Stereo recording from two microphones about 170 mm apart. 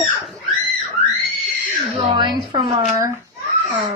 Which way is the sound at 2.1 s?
25° right (ahead or behind).